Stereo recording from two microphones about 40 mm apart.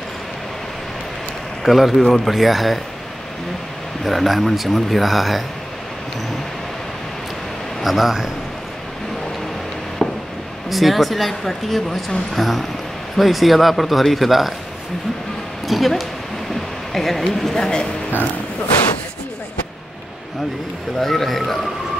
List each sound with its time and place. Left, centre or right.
1.6 s speech: centre
4.0 s speech: centre
7.8 s speech: centre
10.0 s a sound: centre
10.7 s speech: centre
15.6 s speech: centre
21.0 s speech: centre